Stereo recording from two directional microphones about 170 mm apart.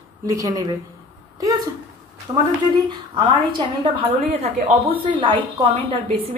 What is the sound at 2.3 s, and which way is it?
A woman's voice, 25° right (ahead or behind).